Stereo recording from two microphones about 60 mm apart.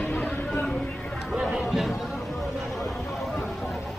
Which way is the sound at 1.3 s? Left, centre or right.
Centre.